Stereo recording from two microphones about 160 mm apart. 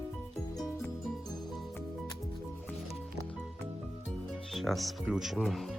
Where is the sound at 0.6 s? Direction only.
25° left (ahead or behind).